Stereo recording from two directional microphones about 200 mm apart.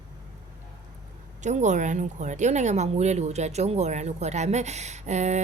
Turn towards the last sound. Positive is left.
turn(degrees=-35)  # may be behind; listen again after turning